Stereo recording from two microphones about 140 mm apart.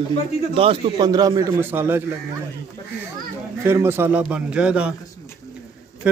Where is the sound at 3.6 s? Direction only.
15° right (ahead or behind).